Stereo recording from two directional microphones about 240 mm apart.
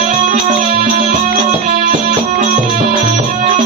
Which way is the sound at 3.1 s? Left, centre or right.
Right.